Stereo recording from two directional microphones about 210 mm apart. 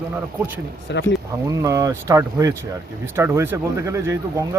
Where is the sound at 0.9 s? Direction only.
55° left (ahead or behind).